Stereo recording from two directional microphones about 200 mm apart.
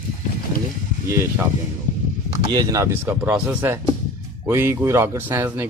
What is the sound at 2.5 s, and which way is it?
A man's voice, 20° right (ahead or behind).